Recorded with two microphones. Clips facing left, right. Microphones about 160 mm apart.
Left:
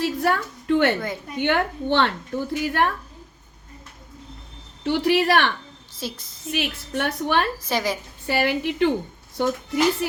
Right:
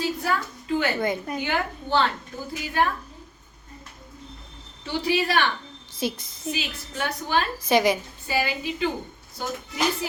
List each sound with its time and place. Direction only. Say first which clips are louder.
0.0 s a woman's voice: left 4 dB; 70° left (ahead or behind)
4.8 s a woman's voice: left 5 dB; 75° left (ahead or behind)
6.0 s a woman's voice: right 5 dB; 15° right (ahead or behind)
6.5 s a woman's voice: left 5 dB; 70° left (ahead or behind)
7.7 s a woman's voice: right 8 dB; 15° right (ahead or behind)
8.3 s a woman's voice: left 4 dB; 70° left (ahead or behind)